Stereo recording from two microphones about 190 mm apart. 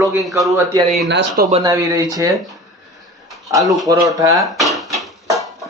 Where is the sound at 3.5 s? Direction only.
20° right (ahead or behind).